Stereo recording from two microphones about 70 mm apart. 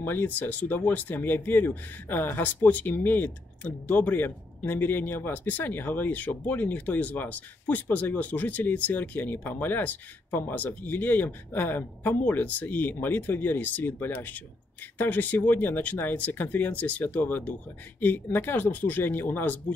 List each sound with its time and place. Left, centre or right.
0.0 s speech: left